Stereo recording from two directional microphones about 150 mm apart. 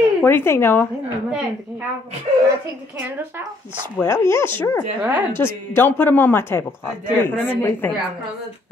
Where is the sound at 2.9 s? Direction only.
15° right (ahead or behind).